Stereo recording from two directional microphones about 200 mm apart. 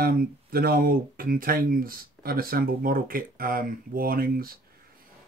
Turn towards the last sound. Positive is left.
turn(degrees=-45)  # may be behind; listen again after turning